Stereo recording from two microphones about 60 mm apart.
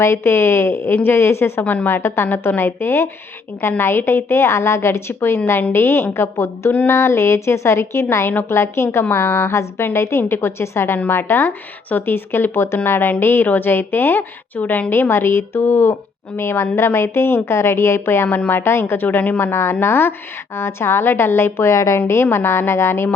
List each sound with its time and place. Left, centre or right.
0.0 s a woman's voice: left
1.6 s a woman's voice: left
2.0 s a woman's voice: left
10.9 s a woman's voice: left
19.4 s a woman's voice: left
21.9 s a woman's voice: left